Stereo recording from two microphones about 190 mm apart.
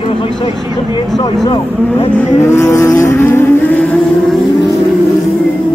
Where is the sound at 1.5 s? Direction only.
35° left (ahead or behind).